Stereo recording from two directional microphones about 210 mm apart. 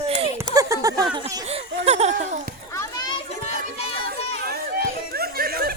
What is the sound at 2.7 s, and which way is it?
Children playing, 20° left (ahead or behind).